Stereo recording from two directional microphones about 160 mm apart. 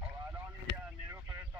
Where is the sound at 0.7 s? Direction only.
90° left.